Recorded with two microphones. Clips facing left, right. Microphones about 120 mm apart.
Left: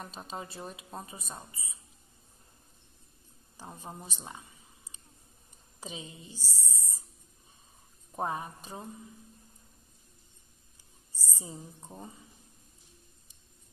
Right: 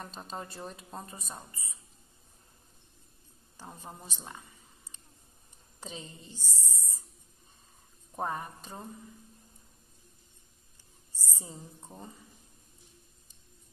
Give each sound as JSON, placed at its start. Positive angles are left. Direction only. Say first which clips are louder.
{"t": 0.0, "sound": "speech", "louder": "even", "side_deg": 5}
{"t": 3.5, "sound": "speech", "louder": "left 2 dB", "side_deg": 15}
{"t": 5.8, "sound": "speech", "louder": "left 1 dB", "side_deg": 10}
{"t": 8.2, "sound": "speech", "louder": "left 1 dB", "side_deg": 15}
{"t": 11.3, "sound": "speech", "louder": "left 2 dB", "side_deg": 10}